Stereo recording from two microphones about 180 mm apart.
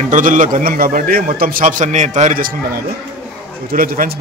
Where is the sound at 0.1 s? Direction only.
45° right (ahead or behind).